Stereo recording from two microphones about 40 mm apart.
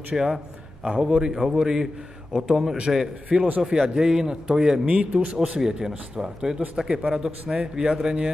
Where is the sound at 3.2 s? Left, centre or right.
Right.